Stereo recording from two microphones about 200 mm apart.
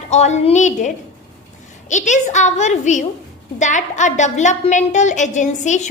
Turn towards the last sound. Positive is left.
turn(degrees=35)  # may be behind; listen again after turning